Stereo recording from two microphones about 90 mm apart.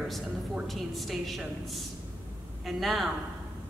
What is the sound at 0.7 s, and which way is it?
A woman's voice, centre (ahead or behind).